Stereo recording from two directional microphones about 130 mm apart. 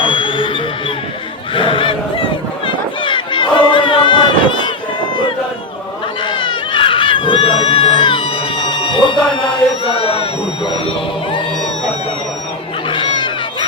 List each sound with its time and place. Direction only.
0.0 s music: 40° left (ahead or behind)
1.5 s fowl: 40° left (ahead or behind)
2.6 s crowd: 40° left (ahead or behind)
6.3 s crowd: 40° left (ahead or behind)
9.8 s a sound: 45° left (ahead or behind)
10.8 s music: 40° left (ahead or behind)
12.9 s a sound: 40° left (ahead or behind)